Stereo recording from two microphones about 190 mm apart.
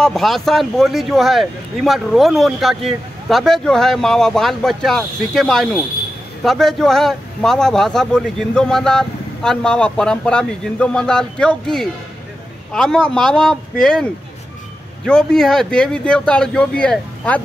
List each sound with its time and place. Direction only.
0.0 s speech: centre (ahead or behind)
15.0 s speech: 5° left (ahead or behind)